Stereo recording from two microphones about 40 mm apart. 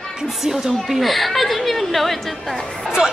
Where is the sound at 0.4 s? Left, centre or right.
Centre.